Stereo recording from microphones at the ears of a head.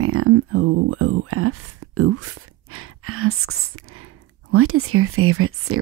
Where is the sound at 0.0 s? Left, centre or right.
Right.